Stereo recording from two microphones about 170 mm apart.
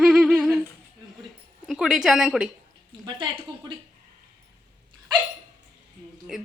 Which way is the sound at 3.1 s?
30° right (ahead or behind).